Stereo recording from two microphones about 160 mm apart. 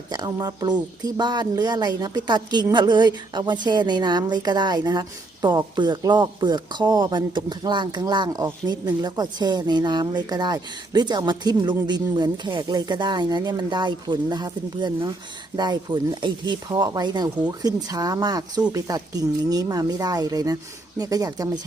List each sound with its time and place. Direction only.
0.1 s speech: 25° right (ahead or behind)